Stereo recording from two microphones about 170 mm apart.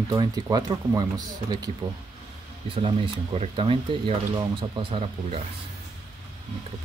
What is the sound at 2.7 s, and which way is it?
Speech, 30° right (ahead or behind).